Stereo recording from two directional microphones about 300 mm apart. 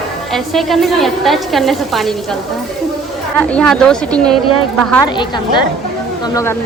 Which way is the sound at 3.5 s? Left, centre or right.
Centre.